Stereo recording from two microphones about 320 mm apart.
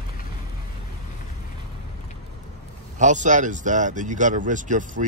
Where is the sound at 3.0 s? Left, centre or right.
Right.